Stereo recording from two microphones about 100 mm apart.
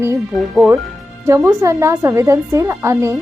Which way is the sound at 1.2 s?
25° right (ahead or behind).